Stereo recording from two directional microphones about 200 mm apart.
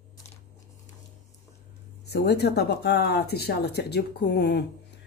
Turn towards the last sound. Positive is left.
turn(degrees=55)  # may be behind; listen again after turning